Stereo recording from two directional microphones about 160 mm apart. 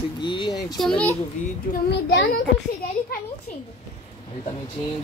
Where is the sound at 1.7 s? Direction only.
90° left.